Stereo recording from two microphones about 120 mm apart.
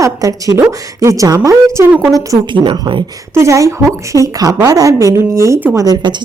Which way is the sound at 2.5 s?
45° right (ahead or behind).